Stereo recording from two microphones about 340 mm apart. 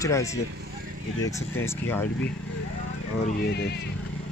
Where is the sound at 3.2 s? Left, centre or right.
Left.